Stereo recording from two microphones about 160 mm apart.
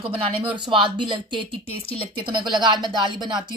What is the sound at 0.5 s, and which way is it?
Speech, 30° right (ahead or behind).